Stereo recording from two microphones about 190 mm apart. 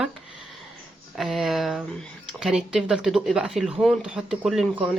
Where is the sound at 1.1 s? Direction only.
Centre (ahead or behind).